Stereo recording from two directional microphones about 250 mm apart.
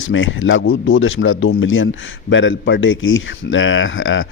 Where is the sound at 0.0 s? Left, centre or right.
Left.